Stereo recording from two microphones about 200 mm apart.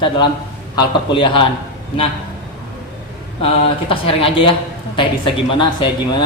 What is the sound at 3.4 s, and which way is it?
A man's voice, 30° left (ahead or behind).